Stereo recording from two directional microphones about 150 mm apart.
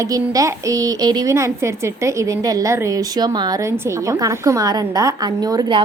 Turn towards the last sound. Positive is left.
turn(degrees=-25)  # may be behind; listen again after turning